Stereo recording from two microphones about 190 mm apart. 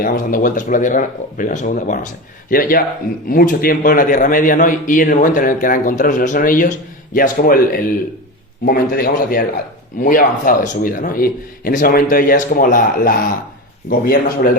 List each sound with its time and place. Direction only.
0.0 s a man's voice: 50° left (ahead or behind)